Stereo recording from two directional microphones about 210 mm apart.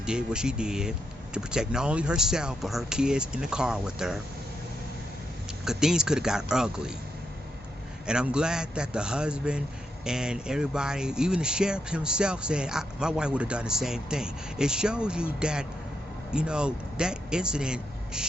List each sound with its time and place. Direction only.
0.0 s speech: 5° right (ahead or behind)
5.6 s speech: 5° right (ahead or behind)
8.0 s speech: 5° right (ahead or behind)